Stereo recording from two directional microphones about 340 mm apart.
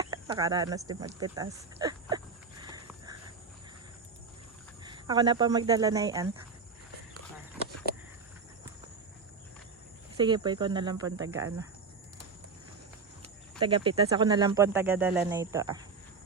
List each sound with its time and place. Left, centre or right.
0.0 s speech: centre
2.6 s a sound: centre
4.8 s speech: centre
10.2 s speech: centre
13.2 s speech: centre